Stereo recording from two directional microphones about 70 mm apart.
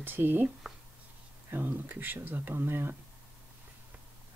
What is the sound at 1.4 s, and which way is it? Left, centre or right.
Speech, right.